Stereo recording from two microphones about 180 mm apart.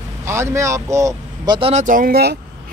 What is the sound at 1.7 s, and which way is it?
Speech, 45° right (ahead or behind).